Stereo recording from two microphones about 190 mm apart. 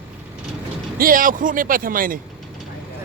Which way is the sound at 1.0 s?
45° right (ahead or behind).